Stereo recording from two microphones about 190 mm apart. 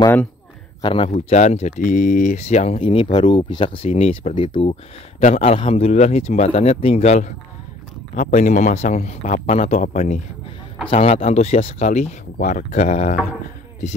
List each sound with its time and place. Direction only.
0.8 s speech: 30° left (ahead or behind)